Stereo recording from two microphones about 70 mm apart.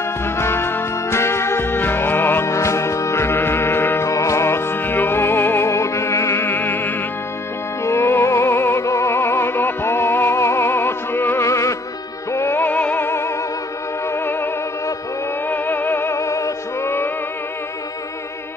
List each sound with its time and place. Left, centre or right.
0.2 s music: left
2.4 s music: left
4.1 s music: left
5.7 s music: left
6.4 s opera: left
7.8 s music: left
11.4 s music: left
12.5 s music: left
15.4 s music: left